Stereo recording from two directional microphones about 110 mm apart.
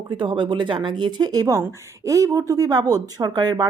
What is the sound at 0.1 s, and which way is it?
A woman's voice, 45° right (ahead or behind).